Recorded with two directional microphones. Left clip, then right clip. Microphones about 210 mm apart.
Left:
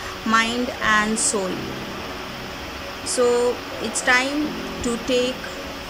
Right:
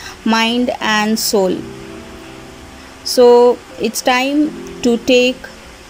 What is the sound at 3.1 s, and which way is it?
Speech, 15° right (ahead or behind).